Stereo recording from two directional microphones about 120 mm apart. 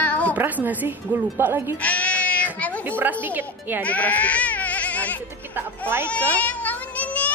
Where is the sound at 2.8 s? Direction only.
15° right (ahead or behind).